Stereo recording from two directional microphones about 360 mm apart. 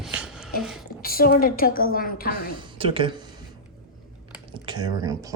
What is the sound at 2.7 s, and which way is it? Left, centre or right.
Speech, centre.